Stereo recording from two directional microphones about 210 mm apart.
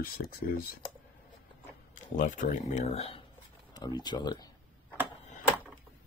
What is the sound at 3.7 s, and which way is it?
Speech, 20° left (ahead or behind).